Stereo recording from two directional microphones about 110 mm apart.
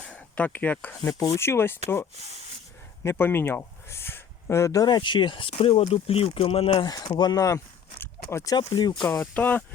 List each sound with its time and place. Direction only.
0.1 s speech: 15° left (ahead or behind)
1.2 s speech: 25° left (ahead or behind)
3.0 s speech: 20° left (ahead or behind); by 6.8 s 60° left (ahead or behind)
6.8 s speech: 40° left (ahead or behind)
8.5 s speech: 40° left (ahead or behind)
9.0 s speech: 10° left (ahead or behind)